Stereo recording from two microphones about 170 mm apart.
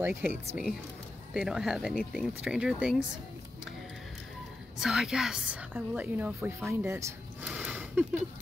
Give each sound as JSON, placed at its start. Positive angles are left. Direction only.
{"t": 0.0, "sound": "a woman's voice", "side_deg": -10}
{"t": 4.7, "sound": "a woman's voice", "side_deg": -5}
{"t": 7.4, "sound": "a sound", "side_deg": -10}